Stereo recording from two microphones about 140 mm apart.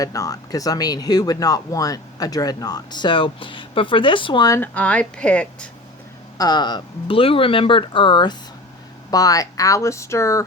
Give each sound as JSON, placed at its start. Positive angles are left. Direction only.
{"t": 0.0, "sound": "speech", "side_deg": 25}
{"t": 4.4, "sound": "speech", "side_deg": 15}
{"t": 6.3, "sound": "speech", "side_deg": 30}